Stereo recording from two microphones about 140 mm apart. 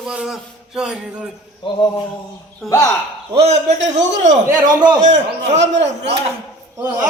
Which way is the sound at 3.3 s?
55° right (ahead or behind).